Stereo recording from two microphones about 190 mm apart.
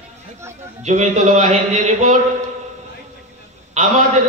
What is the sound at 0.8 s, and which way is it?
Speech, 35° right (ahead or behind).